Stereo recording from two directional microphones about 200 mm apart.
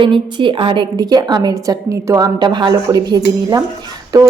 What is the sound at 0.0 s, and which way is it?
Speech, 25° right (ahead or behind).